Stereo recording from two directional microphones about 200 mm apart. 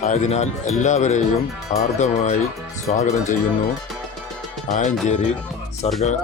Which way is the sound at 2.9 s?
35° left (ahead or behind).